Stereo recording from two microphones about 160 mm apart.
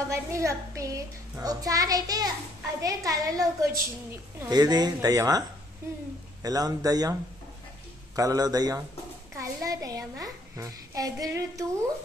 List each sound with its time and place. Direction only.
0.1 s a woman's voice: 20° right (ahead or behind)
6.4 s a child's voice: 25° right (ahead or behind)
8.2 s a child's voice: 25° right (ahead or behind)